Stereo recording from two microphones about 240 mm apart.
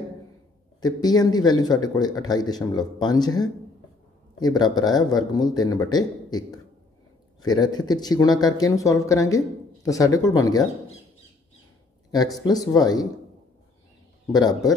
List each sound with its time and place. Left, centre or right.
0.7 s speech: centre
4.4 s speech: centre
12.4 s speech: centre
14.3 s speech: centre